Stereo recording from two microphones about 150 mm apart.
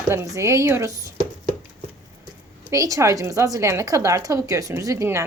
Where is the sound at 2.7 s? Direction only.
20° right (ahead or behind).